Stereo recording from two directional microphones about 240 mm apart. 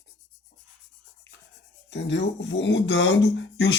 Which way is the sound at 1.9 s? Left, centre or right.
Left.